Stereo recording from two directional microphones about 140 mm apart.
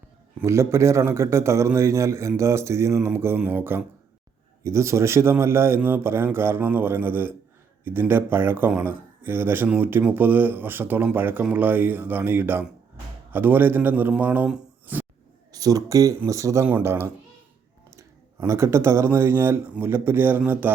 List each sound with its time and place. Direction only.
0.4 s a man's voice: 20° right (ahead or behind)
15.5 s a man's voice: 25° right (ahead or behind)